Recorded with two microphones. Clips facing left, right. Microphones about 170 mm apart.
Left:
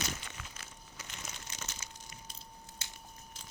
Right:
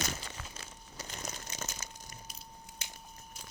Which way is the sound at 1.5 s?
40° right (ahead or behind).